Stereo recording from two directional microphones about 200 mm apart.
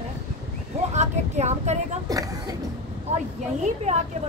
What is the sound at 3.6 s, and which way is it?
Vehicle, 35° right (ahead or behind).